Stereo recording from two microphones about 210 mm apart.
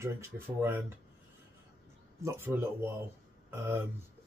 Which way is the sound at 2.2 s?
10° right (ahead or behind).